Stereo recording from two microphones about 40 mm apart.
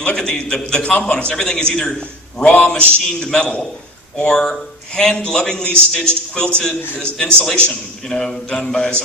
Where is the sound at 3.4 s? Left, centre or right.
Left.